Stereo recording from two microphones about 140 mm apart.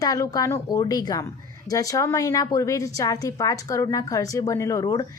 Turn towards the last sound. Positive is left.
turn(degrees=25)  # may be behind; listen again after turning